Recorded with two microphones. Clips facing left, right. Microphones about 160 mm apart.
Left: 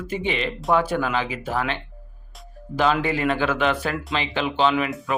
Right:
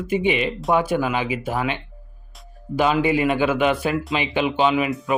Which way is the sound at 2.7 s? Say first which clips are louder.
Right 3 dB; 10° right (ahead or behind).